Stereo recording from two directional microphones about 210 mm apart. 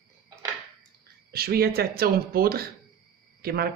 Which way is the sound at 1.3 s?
45° right (ahead or behind).